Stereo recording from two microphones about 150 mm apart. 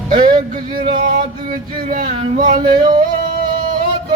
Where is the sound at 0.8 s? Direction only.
60° right (ahead or behind).